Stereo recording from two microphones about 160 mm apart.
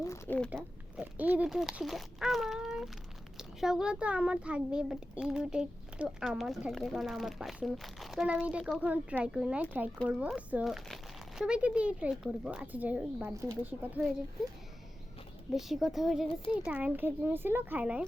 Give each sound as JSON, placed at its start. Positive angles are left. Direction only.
{"t": 0.0, "sound": "speech", "side_deg": 20}
{"t": 0.5, "sound": "a child's voice", "side_deg": -10}
{"t": 15.5, "sound": "a child's voice", "side_deg": 0}